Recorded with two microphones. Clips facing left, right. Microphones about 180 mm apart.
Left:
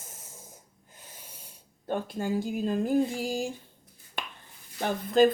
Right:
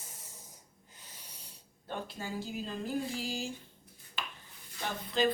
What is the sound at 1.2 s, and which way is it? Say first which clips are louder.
Speech: left 4 dB; 50° left (ahead or behind).